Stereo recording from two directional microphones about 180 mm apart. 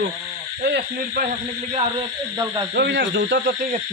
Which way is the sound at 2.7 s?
70° right (ahead or behind).